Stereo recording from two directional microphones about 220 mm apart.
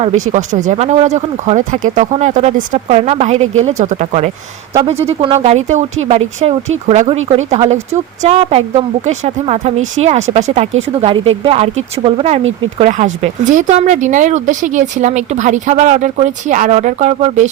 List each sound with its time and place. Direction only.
0.3 s speech: 35° right (ahead or behind)